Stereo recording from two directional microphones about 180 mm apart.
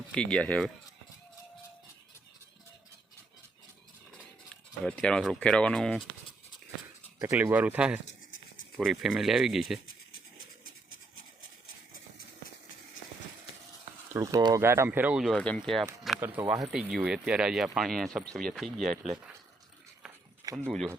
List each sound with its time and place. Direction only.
0.1 s speech: 5° left (ahead or behind)
4.8 s speech: 5° left (ahead or behind)
7.2 s speech: 15° right (ahead or behind)
14.1 s speech: 20° right (ahead or behind); by 15.9 s centre (ahead or behind)
16.2 s speech: 10° right (ahead or behind)
20.1 s a sound: 15° right (ahead or behind)
20.7 s speech: centre (ahead or behind)